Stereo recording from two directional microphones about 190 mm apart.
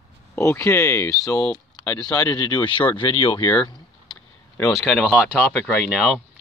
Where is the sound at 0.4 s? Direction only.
15° left (ahead or behind).